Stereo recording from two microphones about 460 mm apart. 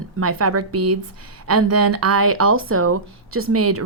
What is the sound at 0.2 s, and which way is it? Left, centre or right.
Speech, right.